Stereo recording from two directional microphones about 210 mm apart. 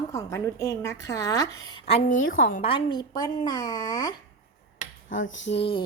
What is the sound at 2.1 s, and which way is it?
Speech, 70° left (ahead or behind).